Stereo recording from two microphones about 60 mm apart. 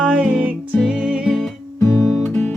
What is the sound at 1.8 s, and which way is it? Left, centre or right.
Music, centre.